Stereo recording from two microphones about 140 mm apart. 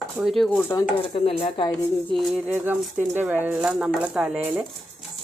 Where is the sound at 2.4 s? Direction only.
15° right (ahead or behind).